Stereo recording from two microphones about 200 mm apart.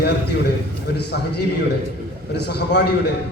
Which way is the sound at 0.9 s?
55° left (ahead or behind).